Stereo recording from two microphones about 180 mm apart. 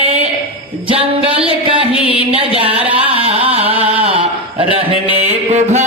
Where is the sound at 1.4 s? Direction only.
30° right (ahead or behind).